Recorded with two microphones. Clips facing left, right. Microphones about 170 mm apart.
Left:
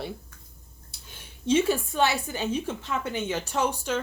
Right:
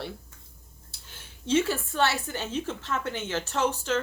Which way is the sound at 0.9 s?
15° left (ahead or behind).